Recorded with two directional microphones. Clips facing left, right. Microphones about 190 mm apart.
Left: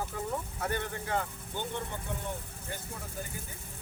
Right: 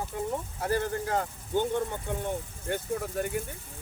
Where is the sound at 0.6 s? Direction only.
35° right (ahead or behind).